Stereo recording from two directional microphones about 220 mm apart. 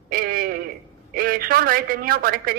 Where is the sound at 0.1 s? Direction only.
40° right (ahead or behind).